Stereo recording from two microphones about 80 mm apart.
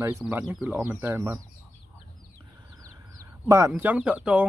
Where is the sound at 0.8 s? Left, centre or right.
Right.